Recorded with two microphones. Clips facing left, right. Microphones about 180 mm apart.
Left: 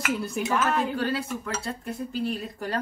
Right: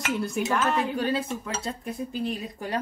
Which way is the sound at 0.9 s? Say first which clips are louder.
Right 1 dB; 20° right (ahead or behind).